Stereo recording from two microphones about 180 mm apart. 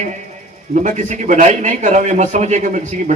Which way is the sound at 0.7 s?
40° right (ahead or behind).